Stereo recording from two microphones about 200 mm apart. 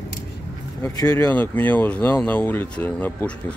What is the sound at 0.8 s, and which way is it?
Speech, 20° left (ahead or behind).